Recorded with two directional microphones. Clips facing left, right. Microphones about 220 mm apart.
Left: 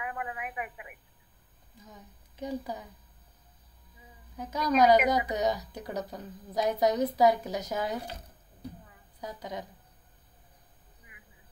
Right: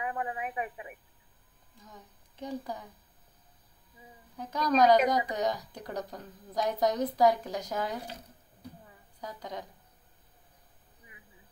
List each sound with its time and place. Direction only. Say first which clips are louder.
0.0 s a woman's voice: right 3 dB; 30° right (ahead or behind)
2.4 s a woman's voice: left 2 dB; 10° left (ahead or behind)
4.4 s a woman's voice: left 1 dB; 5° left (ahead or behind)
9.2 s a woman's voice: left 2 dB; 10° left (ahead or behind)